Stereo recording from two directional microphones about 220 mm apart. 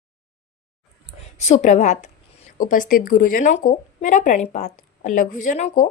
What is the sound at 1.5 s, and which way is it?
A woman's voice, 35° left (ahead or behind).